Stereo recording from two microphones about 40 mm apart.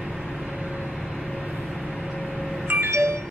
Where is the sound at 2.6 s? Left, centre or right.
Right.